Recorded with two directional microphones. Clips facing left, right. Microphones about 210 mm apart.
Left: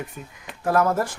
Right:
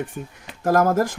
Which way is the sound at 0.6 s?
45° right (ahead or behind).